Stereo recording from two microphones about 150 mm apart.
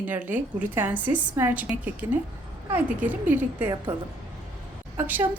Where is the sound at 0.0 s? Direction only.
10° right (ahead or behind).